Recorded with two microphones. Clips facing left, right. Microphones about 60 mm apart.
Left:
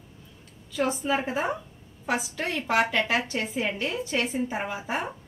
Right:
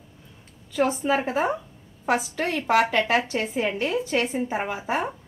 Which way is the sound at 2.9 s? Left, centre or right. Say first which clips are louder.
Right 3 dB; right.